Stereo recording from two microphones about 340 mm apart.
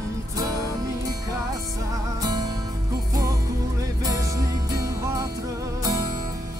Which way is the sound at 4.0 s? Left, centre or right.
Centre.